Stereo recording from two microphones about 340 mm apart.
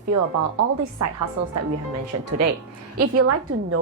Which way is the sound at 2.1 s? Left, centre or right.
Right.